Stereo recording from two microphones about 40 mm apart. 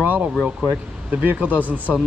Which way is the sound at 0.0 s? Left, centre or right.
Right.